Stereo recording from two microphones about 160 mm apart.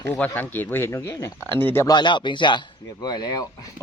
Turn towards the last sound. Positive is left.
turn(degrees=25)  # may be behind; listen again after turning